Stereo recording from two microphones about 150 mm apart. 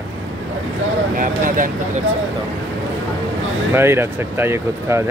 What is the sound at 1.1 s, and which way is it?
Speech, 65° right (ahead or behind).